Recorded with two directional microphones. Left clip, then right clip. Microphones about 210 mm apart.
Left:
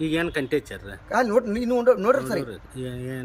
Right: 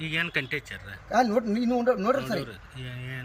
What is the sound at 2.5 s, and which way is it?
Speech, 35° left (ahead or behind).